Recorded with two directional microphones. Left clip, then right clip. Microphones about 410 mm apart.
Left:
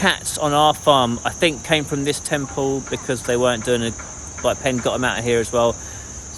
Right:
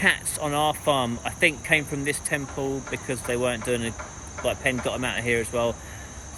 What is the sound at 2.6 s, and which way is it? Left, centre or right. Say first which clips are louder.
Speech: left 7 dB; left.